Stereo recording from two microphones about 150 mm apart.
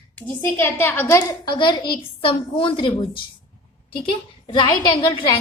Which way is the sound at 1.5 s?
30° left (ahead or behind).